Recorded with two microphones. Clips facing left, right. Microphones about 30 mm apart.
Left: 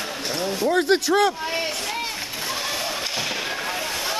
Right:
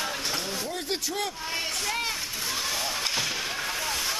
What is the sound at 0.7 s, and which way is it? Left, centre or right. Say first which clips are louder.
Speech: left 12 dB; left.